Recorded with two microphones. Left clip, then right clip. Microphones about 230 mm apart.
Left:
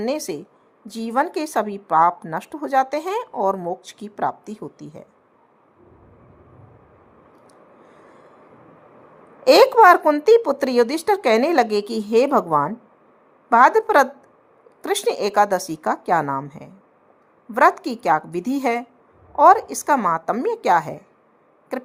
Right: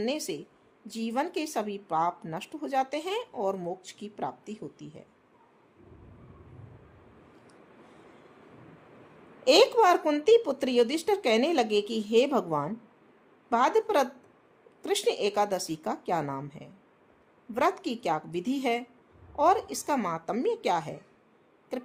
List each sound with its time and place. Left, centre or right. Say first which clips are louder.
0.1 s a woman's voice: left 8 dB; centre
9.4 s a woman's voice: left 9 dB; centre
17.5 s a woman's voice: left 11 dB; centre